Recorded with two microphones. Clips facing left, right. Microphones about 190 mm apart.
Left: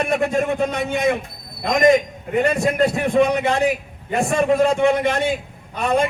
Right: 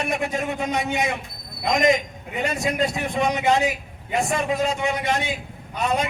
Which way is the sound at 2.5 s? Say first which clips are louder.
Left 5 dB; 55° left (ahead or behind).